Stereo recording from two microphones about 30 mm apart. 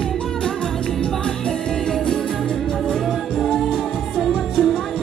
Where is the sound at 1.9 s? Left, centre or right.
Centre.